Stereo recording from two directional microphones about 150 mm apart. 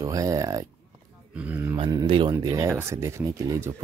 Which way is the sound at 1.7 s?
30° right (ahead or behind).